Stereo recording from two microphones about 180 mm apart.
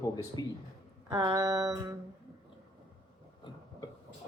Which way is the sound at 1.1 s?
20° right (ahead or behind).